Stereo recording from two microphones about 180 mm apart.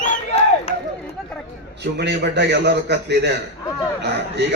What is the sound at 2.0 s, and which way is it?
A man's voice, 70° right (ahead or behind).